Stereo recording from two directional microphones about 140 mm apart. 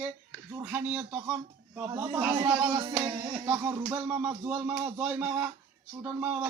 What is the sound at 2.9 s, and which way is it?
Speech, 10° right (ahead or behind).